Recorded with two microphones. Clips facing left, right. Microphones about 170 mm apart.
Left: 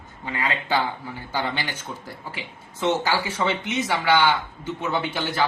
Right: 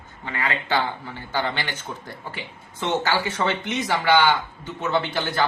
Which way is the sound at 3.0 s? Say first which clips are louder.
Right 1 dB; 10° left (ahead or behind).